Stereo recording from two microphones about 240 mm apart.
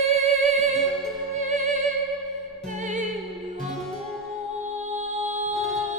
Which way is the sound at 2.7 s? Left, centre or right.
Right.